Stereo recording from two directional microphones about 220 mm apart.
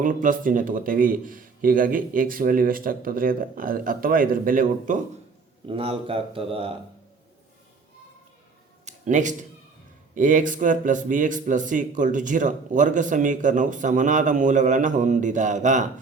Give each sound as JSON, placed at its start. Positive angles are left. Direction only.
{"t": 0.0, "sound": "a man's voice", "side_deg": -35}
{"t": 5.6, "sound": "speech", "side_deg": -25}
{"t": 8.8, "sound": "a sound", "side_deg": -35}
{"t": 10.2, "sound": "a man's voice", "side_deg": -35}